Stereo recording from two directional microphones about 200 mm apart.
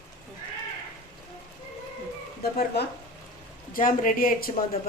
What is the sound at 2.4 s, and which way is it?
Speech, 50° left (ahead or behind).